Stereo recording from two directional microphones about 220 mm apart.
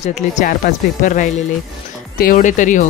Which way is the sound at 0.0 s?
30° left (ahead or behind).